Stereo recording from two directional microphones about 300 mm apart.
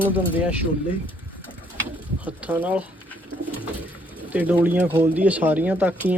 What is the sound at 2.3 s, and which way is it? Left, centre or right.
Speech, centre.